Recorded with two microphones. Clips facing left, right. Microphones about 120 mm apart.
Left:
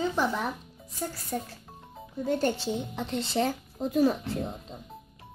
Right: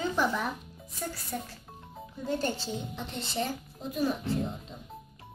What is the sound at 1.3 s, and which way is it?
Speech, 35° left (ahead or behind).